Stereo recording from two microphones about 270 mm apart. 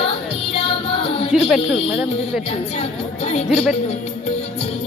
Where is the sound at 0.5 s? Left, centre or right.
Left.